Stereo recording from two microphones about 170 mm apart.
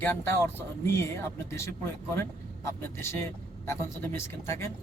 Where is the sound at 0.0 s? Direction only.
10° left (ahead or behind).